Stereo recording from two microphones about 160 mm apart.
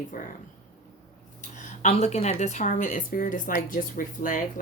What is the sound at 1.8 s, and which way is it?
A woman's voice, 40° left (ahead or behind).